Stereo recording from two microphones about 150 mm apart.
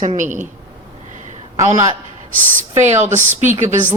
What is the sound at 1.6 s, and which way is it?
Speech, 20° right (ahead or behind).